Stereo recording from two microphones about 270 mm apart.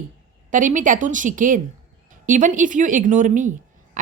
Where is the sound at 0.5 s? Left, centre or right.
Right.